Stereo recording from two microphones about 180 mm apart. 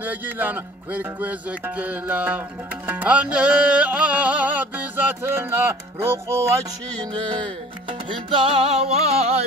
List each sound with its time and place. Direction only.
0.0 s music: 10° right (ahead or behind)
8.3 s music: 30° right (ahead or behind)